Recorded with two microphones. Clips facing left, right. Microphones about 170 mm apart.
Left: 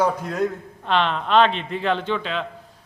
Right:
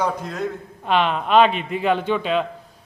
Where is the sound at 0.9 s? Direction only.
10° right (ahead or behind).